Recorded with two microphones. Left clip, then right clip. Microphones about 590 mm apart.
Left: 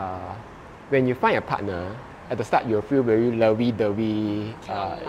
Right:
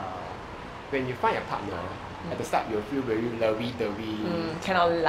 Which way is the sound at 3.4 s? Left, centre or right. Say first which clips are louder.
Left 6 dB; left.